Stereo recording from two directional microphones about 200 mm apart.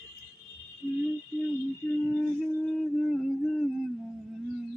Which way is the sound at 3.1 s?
Centre (ahead or behind).